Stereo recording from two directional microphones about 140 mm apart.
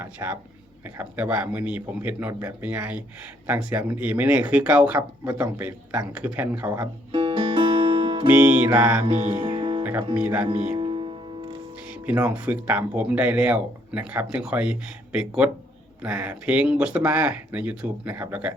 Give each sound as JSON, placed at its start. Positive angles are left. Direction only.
{"t": 0.0, "sound": "speech", "side_deg": -15}
{"t": 7.1, "sound": "music", "side_deg": -35}
{"t": 8.3, "sound": "speech", "side_deg": -15}
{"t": 9.0, "sound": "music", "side_deg": -50}
{"t": 9.3, "sound": "music", "side_deg": -35}
{"t": 10.2, "sound": "speech", "side_deg": -15}
{"t": 10.4, "sound": "music", "side_deg": -45}
{"t": 11.9, "sound": "speech", "side_deg": -15}